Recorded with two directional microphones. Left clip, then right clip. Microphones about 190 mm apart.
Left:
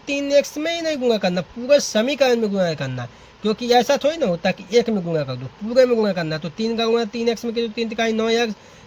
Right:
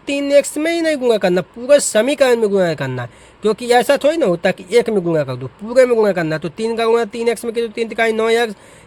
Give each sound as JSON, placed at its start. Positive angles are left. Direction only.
{"t": 0.0, "sound": "speech", "side_deg": -50}